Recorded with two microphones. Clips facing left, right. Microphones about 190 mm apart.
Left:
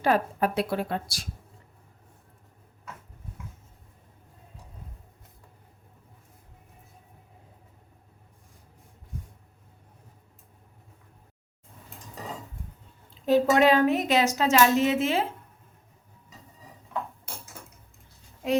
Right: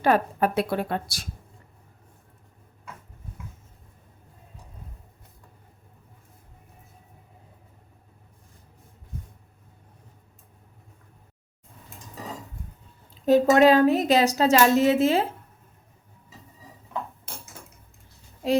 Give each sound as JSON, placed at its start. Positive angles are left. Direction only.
{"t": 0.0, "sound": "a woman's voice", "side_deg": -55}
{"t": 13.2, "sound": "a woman's voice", "side_deg": -40}